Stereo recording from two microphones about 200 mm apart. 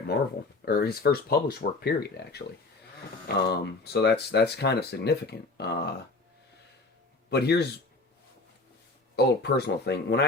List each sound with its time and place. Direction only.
0.6 s speech: 50° left (ahead or behind)
7.3 s speech: 55° left (ahead or behind)
9.1 s speech: 55° left (ahead or behind)